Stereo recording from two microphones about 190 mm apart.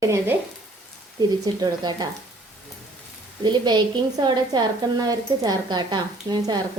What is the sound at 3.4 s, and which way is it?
Speech, 25° right (ahead or behind).